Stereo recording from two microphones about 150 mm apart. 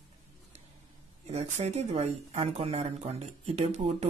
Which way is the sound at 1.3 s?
45° right (ahead or behind).